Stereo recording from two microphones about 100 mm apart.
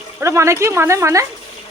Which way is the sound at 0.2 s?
30° right (ahead or behind).